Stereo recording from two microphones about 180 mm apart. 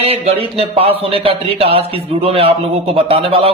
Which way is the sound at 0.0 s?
30° right (ahead or behind).